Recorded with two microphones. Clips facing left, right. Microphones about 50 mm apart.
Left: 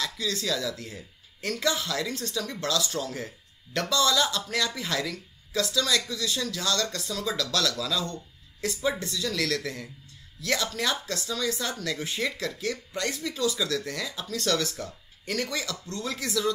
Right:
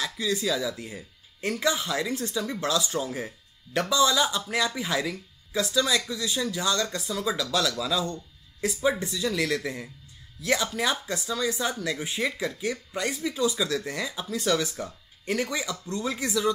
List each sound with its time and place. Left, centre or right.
0.0 s speech: centre